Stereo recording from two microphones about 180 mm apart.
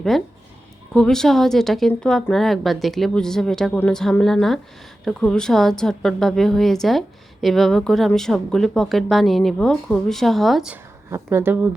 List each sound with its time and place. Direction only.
0.1 s speech: centre (ahead or behind)
11.1 s speech: 15° right (ahead or behind)